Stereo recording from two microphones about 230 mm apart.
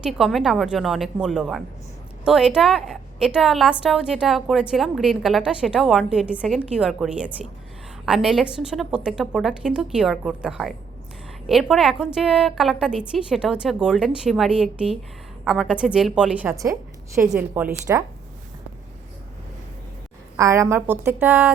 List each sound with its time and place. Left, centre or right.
0.0 s a woman's voice: centre
20.3 s a woman's voice: centre